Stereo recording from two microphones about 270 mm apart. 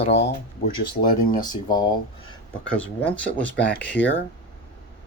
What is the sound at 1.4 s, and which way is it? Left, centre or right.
Speech, centre.